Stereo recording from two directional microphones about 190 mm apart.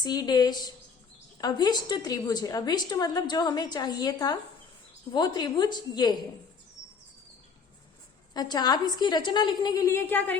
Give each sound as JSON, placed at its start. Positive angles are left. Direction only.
{"t": 0.0, "sound": "a woman's voice", "side_deg": 20}
{"t": 8.3, "sound": "a woman's voice", "side_deg": 20}